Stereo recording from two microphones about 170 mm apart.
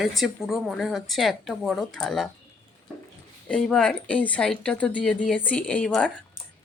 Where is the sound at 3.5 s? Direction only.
5° left (ahead or behind).